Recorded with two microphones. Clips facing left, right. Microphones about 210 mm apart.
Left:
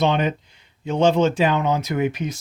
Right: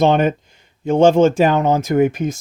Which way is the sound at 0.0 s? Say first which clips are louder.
Right 6 dB; 50° right (ahead or behind).